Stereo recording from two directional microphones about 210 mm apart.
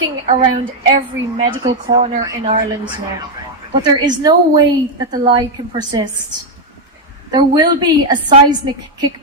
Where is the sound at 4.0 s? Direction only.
20° right (ahead or behind).